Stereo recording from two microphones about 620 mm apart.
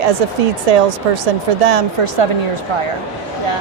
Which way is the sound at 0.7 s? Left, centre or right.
Right.